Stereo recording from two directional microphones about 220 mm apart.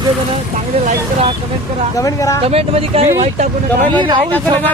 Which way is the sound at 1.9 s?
15° left (ahead or behind).